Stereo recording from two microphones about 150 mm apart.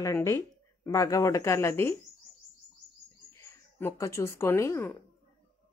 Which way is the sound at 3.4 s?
15° left (ahead or behind).